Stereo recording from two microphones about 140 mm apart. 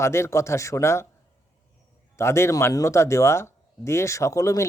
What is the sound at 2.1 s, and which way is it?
Speech, 20° left (ahead or behind).